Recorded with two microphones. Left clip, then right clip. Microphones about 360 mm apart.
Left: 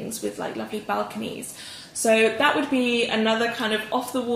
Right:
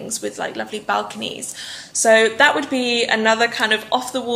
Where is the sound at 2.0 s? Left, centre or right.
Right.